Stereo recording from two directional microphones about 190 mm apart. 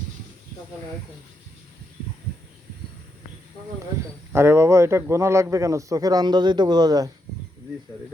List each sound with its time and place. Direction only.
4.3 s a man's voice: 15° right (ahead or behind)